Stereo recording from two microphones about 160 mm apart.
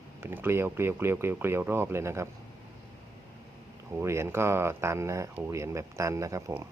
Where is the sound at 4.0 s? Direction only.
15° right (ahead or behind).